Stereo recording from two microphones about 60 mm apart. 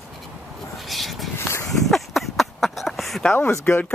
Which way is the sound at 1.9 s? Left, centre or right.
Centre.